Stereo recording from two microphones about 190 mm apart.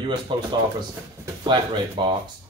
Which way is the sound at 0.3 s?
25° right (ahead or behind).